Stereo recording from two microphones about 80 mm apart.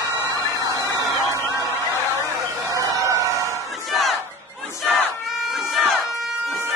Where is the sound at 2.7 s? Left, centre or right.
Right.